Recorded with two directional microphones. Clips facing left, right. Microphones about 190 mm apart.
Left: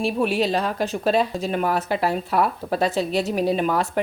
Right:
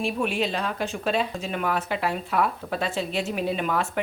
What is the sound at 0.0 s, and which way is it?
Speech, 35° left (ahead or behind).